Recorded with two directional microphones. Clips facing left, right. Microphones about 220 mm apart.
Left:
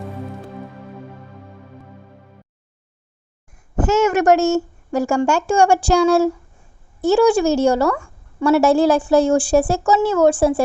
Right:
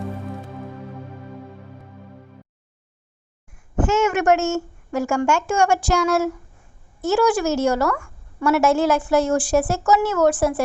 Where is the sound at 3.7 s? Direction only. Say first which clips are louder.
Left 3 dB; 40° left (ahead or behind).